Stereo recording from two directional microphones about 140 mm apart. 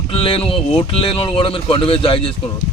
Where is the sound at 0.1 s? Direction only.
40° left (ahead or behind).